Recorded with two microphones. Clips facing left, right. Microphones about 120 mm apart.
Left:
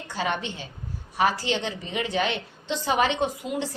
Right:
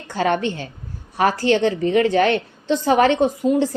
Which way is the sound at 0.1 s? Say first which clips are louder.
Right 9 dB; 55° right (ahead or behind).